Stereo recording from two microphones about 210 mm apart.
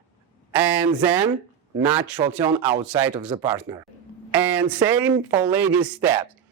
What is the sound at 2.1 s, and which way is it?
Speech, 15° right (ahead or behind).